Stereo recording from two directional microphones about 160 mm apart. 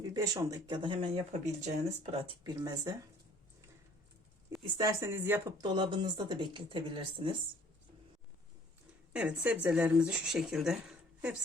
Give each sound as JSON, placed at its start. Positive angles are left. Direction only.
{"t": 0.0, "sound": "speech", "side_deg": -25}
{"t": 4.6, "sound": "speech", "side_deg": -20}
{"t": 5.5, "sound": "speech", "side_deg": -30}
{"t": 9.1, "sound": "speech", "side_deg": -10}